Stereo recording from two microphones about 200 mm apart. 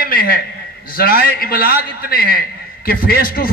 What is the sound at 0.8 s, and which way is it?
A man's voice, 45° left (ahead or behind).